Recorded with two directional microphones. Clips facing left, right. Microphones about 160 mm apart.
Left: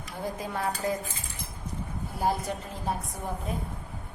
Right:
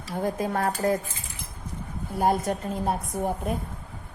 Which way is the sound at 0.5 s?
50° right (ahead or behind).